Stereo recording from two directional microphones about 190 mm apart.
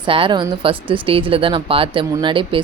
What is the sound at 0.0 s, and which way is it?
Speech, 25° right (ahead or behind).